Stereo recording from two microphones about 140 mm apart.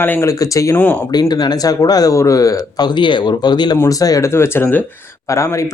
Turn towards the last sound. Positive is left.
turn(degrees=20)  # may be behind; listen again after turning